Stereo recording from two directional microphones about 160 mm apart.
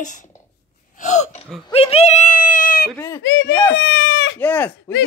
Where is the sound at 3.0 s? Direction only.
15° left (ahead or behind).